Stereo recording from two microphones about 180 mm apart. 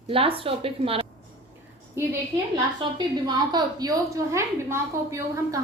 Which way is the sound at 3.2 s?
25° right (ahead or behind).